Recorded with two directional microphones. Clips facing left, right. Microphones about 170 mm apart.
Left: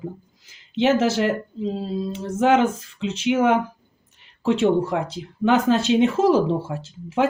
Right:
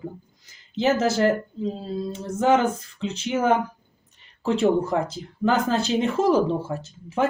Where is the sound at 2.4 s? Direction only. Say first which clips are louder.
Left 2 dB; 90° left.